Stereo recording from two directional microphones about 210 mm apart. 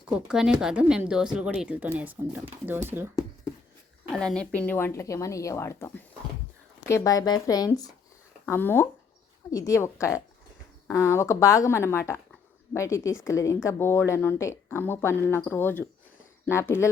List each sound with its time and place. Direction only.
0.1 s speech: 5° right (ahead or behind)
4.1 s a woman's voice: 5° left (ahead or behind)